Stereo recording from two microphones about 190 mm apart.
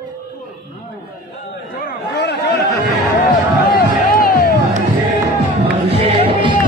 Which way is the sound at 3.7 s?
50° left (ahead or behind).